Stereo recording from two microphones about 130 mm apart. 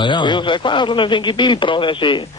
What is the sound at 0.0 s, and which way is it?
A man's voice, 35° left (ahead or behind).